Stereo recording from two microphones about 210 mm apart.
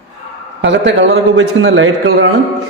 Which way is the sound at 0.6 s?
60° right (ahead or behind).